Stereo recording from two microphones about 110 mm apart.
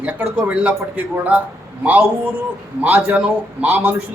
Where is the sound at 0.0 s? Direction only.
15° right (ahead or behind).